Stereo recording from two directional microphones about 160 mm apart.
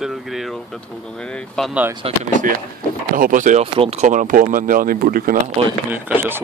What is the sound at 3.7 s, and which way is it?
Speech, 40° right (ahead or behind).